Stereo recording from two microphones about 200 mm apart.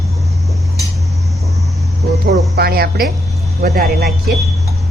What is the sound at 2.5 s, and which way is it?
Music, 50° right (ahead or behind).